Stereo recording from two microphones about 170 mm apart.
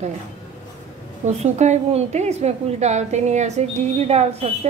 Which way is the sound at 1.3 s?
40° right (ahead or behind).